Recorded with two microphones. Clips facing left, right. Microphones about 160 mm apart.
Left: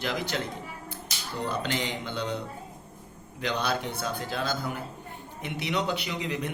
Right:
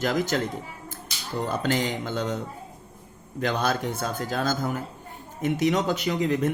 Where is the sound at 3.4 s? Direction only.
45° right (ahead or behind).